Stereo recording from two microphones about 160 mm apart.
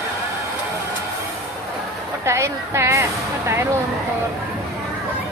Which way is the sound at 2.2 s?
20° right (ahead or behind).